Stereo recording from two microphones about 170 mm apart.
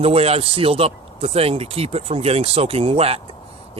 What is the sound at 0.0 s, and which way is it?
Speech, 35° right (ahead or behind).